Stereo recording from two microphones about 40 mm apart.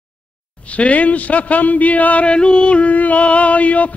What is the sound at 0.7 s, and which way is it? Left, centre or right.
Music, left.